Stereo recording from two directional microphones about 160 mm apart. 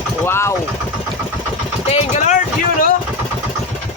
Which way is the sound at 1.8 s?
40° left (ahead or behind).